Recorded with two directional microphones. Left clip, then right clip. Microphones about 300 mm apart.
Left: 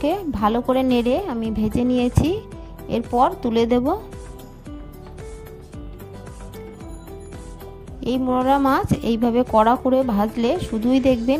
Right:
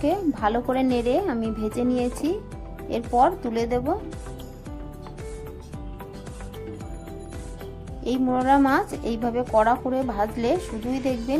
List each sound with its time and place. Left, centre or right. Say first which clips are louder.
0.0 s a woman's voice: left 2 dB; left
8.0 s a woman's voice: left 3 dB; left